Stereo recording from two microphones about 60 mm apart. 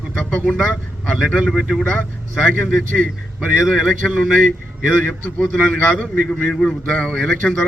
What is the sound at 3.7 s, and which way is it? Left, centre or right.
Speech, centre.